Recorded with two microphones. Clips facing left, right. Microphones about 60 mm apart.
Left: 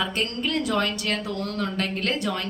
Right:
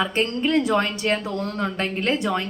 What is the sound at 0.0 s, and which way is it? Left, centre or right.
A woman's voice, right.